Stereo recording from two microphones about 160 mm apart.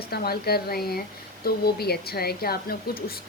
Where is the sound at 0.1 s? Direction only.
75° left (ahead or behind).